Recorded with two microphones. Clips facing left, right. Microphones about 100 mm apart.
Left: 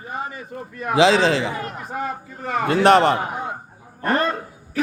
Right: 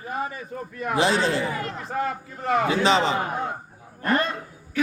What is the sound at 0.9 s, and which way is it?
Speech, 90° left.